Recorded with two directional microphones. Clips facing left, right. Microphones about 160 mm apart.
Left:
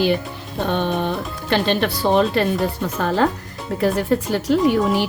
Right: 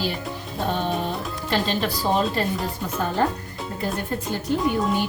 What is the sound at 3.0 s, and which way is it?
Speech, 90° left.